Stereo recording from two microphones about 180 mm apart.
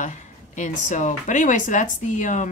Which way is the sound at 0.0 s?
45° left (ahead or behind).